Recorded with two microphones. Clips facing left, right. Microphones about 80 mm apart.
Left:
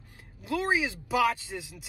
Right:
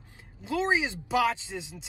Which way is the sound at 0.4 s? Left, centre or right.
Right.